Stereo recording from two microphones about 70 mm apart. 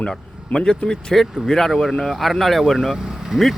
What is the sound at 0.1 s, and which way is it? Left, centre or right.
Speech, centre.